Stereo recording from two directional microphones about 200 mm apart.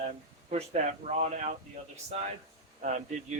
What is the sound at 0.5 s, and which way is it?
Speech, 35° right (ahead or behind).